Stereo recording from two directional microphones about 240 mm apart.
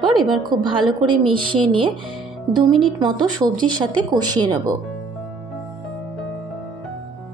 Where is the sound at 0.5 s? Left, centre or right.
Centre.